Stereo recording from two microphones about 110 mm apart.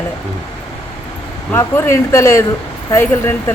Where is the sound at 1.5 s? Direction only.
20° left (ahead or behind).